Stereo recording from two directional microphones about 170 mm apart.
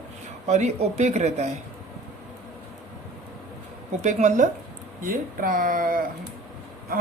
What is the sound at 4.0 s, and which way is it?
Speech, 40° right (ahead or behind).